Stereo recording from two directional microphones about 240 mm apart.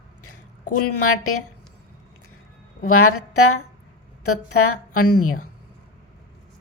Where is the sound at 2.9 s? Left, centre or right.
Left.